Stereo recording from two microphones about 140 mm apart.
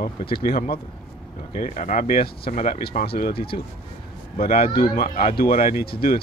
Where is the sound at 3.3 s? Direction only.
40° left (ahead or behind).